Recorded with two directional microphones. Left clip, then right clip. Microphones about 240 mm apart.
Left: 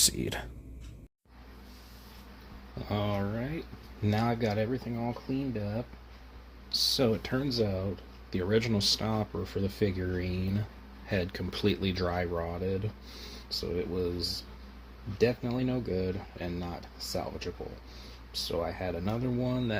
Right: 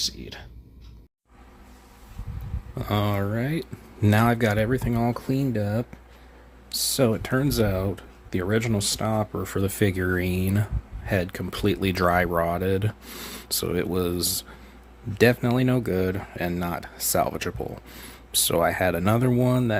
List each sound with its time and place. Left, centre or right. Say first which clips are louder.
0.0 s speech: left 1 dB; left
2.7 s speech: right 7 dB; right
4.0 s speech: right 9 dB; right
6.9 s speech: right 6 dB; right